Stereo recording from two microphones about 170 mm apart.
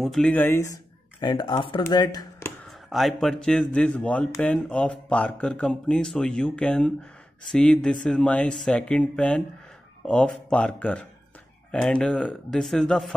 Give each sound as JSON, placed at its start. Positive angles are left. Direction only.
{"t": 0.0, "sound": "speech", "side_deg": 5}
{"t": 1.2, "sound": "speech", "side_deg": 25}
{"t": 2.9, "sound": "speech", "side_deg": 0}